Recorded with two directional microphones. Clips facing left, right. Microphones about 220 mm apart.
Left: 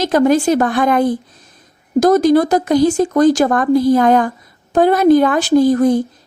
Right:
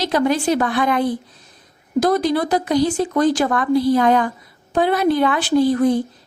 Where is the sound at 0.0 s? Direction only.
45° left (ahead or behind).